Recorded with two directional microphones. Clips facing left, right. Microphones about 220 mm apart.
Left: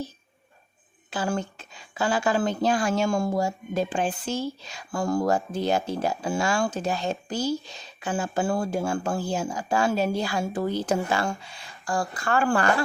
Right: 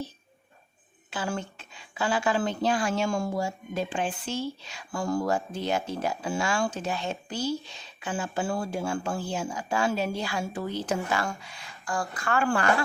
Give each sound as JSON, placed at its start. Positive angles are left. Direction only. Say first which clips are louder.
{"t": 1.1, "sound": "a woman's voice", "louder": "left 4 dB", "side_deg": 40}